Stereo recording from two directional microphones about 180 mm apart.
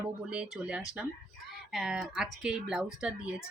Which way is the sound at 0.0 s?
5° right (ahead or behind).